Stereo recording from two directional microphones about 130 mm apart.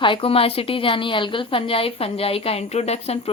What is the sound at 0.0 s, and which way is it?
A woman's voice, 40° left (ahead or behind).